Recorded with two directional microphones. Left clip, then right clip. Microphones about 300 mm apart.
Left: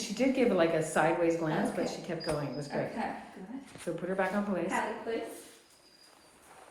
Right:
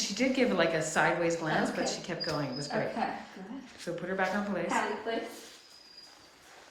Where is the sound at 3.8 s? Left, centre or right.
Centre.